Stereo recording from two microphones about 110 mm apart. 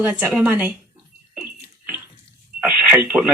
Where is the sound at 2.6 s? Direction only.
15° right (ahead or behind).